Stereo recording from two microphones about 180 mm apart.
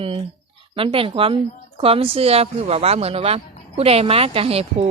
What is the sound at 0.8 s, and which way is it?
Speech, 30° right (ahead or behind).